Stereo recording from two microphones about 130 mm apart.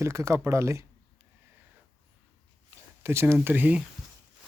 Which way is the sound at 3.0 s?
20° right (ahead or behind).